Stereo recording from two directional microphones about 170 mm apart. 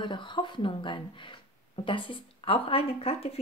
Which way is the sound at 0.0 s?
30° left (ahead or behind).